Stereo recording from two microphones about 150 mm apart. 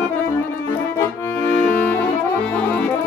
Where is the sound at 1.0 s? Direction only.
10° left (ahead or behind).